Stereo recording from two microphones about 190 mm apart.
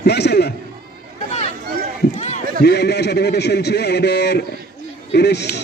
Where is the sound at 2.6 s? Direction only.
60° left (ahead or behind).